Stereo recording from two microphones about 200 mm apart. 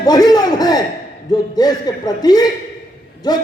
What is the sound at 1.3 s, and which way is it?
A man's voice, 20° left (ahead or behind).